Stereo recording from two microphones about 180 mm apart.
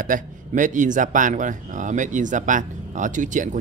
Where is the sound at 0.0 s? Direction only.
45° right (ahead or behind).